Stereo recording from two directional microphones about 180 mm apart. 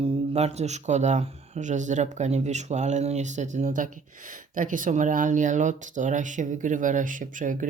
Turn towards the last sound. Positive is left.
turn(degrees=-45)  # may be behind; listen again after turning